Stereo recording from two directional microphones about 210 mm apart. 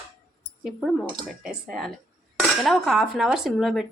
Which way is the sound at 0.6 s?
Centre (ahead or behind).